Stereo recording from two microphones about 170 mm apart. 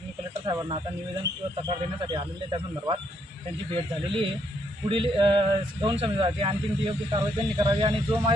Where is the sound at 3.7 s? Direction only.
30° right (ahead or behind).